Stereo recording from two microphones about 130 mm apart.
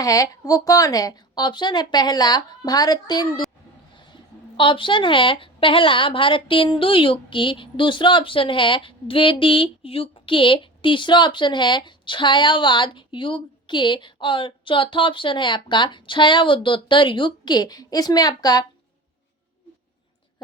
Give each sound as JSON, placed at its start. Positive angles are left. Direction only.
{"t": 0.0, "sound": "a woman's voice", "side_deg": 25}